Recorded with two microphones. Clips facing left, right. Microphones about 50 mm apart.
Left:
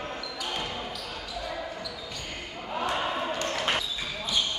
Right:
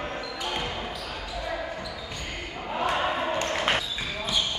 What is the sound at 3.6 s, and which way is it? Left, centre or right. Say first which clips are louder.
Basketball bounce: right 2 dB; right.